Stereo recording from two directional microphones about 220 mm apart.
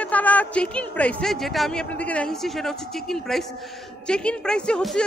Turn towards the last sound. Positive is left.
turn(degrees=5)  # may be behind; listen again after turning